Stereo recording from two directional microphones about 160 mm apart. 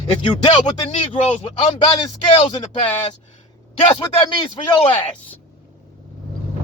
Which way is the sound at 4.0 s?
30° left (ahead or behind).